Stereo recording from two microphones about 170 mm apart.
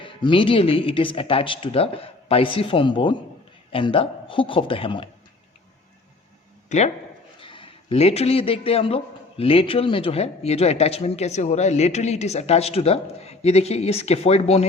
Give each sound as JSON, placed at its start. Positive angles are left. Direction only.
{"t": 0.0, "sound": "speech", "side_deg": 30}
{"t": 6.7, "sound": "speech", "side_deg": 40}
{"t": 7.3, "sound": "a man's voice", "side_deg": 30}